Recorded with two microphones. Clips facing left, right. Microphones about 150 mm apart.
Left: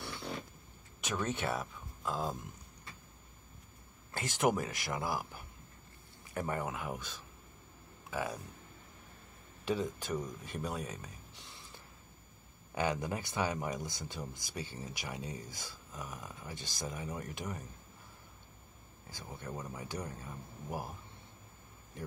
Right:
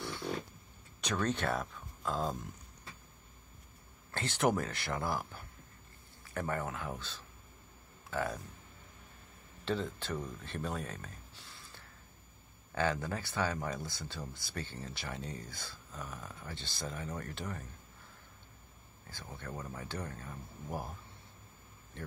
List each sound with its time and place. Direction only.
1.0 s speech: 10° left (ahead or behind)
4.1 s speech: 10° left (ahead or behind)
9.7 s speech: 10° left (ahead or behind)
11.4 s gasp: 20° left (ahead or behind)
12.7 s speech: 15° left (ahead or behind)
19.0 s speech: 15° left (ahead or behind)